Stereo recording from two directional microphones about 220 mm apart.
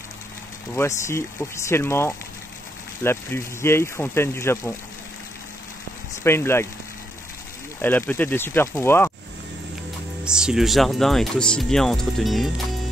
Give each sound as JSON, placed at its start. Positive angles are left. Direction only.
{"t": 0.7, "sound": "speech", "side_deg": 10}
{"t": 6.2, "sound": "speech", "side_deg": 10}
{"t": 7.8, "sound": "speech", "side_deg": 10}
{"t": 10.2, "sound": "speech", "side_deg": -5}